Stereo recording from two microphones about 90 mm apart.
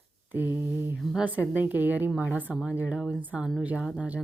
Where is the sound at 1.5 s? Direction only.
20° right (ahead or behind).